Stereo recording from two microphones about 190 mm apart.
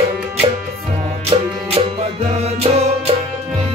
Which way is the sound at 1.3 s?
30° right (ahead or behind).